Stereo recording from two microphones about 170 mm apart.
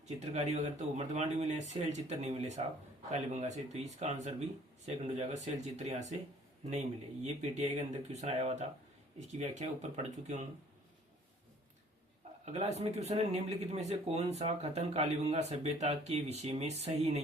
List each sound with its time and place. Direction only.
0.2 s speech: 40° right (ahead or behind)
12.5 s speech: 40° right (ahead or behind)